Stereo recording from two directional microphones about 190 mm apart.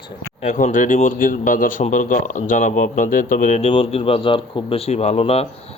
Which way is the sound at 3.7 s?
30° left (ahead or behind).